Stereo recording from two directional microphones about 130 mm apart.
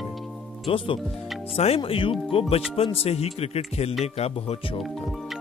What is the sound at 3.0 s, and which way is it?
Speech, 55° left (ahead or behind).